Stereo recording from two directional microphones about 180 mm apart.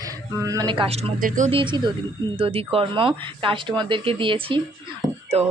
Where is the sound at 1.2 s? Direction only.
45° right (ahead or behind).